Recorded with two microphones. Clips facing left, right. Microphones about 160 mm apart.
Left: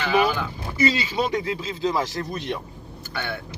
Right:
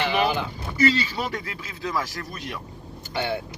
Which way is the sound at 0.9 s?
20° left (ahead or behind).